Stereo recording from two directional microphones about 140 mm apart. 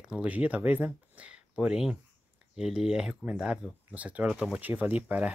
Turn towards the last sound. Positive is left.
turn(degrees=-10)  # may be behind; listen again after turning